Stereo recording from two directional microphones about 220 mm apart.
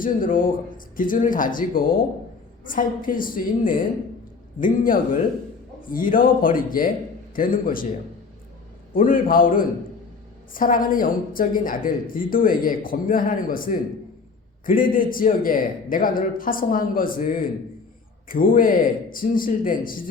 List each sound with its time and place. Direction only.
0.0 s a woman's voice: 40° left (ahead or behind)
8.9 s a woman's voice: 40° left (ahead or behind)